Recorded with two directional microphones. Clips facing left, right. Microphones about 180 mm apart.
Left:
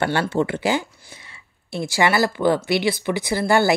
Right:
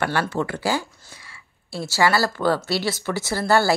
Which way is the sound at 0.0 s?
25° left (ahead or behind).